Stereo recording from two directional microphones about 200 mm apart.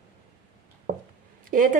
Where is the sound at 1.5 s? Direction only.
45° right (ahead or behind).